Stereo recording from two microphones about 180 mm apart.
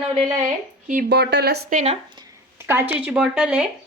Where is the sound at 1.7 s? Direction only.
40° right (ahead or behind).